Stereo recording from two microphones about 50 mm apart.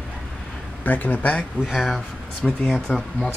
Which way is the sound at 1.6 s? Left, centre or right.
Centre.